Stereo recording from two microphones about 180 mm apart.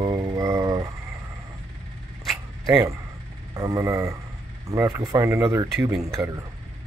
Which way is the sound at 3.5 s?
15° right (ahead or behind).